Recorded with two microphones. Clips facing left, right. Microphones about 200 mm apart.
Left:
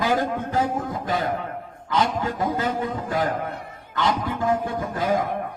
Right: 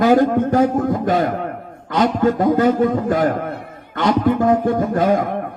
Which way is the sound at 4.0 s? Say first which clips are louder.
Right 8 dB; 55° right (ahead or behind).